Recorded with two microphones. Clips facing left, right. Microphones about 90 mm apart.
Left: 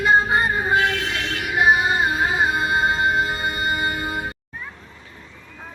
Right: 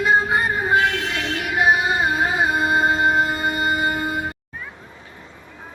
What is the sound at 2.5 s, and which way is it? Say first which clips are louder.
Music: right 2 dB; 5° right (ahead or behind).